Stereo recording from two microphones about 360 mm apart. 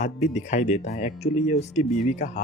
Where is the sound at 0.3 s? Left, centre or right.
Centre.